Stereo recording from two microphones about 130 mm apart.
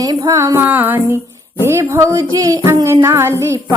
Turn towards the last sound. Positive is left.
turn(degrees=-20)  # may be behind; listen again after turning